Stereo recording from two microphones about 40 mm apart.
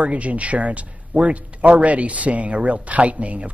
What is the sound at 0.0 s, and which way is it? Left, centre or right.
Speech, right.